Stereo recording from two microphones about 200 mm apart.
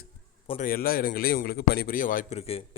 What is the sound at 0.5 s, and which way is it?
A man's voice, 45° left (ahead or behind).